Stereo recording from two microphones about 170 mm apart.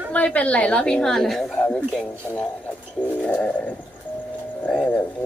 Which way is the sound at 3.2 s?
5° left (ahead or behind).